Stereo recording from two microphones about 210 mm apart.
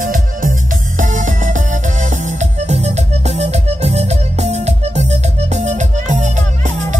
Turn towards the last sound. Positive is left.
turn(degrees=-35)  # may be behind; listen again after turning